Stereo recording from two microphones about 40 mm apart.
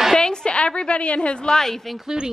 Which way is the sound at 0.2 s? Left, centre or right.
Centre.